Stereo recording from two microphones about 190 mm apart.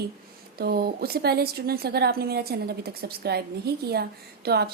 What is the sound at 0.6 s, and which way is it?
A woman's voice, 55° right (ahead or behind).